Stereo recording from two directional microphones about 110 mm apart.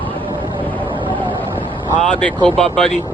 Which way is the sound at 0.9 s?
50° right (ahead or behind).